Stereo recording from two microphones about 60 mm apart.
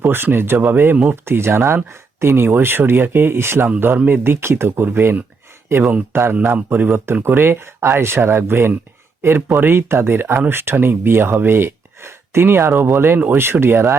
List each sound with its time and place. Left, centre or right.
0.0 s speech: right
5.7 s speech: right
6.5 s speech: right